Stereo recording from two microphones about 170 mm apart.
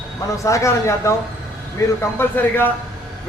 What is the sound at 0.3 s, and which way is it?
Speech, 20° left (ahead or behind).